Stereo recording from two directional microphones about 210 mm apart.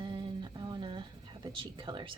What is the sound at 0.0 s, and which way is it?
Speech, 25° right (ahead or behind).